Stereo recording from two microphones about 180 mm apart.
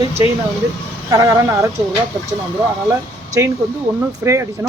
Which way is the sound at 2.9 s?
15° right (ahead or behind).